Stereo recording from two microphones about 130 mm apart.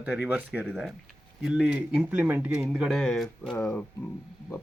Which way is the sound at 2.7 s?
Centre (ahead or behind).